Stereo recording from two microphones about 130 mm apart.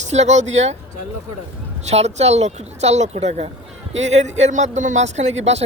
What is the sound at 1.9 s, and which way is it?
Speech, 55° right (ahead or behind).